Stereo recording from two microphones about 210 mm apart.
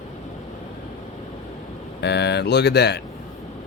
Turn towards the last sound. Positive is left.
turn(degrees=50)  # may be behind; listen again after turning